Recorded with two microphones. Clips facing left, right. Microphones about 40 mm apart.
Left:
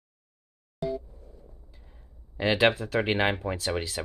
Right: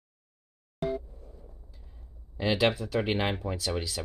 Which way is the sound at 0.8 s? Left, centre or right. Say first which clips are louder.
Even; right.